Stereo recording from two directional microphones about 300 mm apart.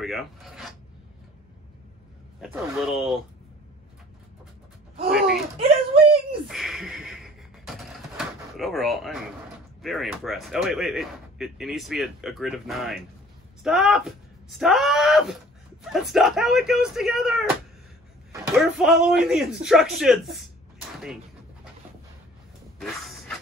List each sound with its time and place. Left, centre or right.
0.0 s speech: centre
2.4 s speech: centre
5.6 s speech: centre
6.5 s a sound: centre
8.5 s speech: centre
22.8 s a sound: centre